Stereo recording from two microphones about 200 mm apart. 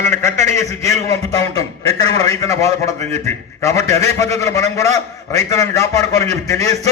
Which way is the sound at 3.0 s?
35° right (ahead or behind).